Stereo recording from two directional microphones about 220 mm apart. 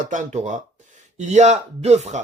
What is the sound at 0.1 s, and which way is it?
Speech, 35° right (ahead or behind).